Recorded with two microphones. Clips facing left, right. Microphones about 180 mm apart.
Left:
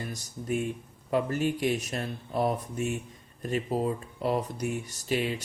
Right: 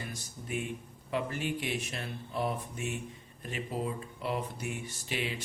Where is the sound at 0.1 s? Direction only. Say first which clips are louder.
Left 7 dB; 40° left (ahead or behind).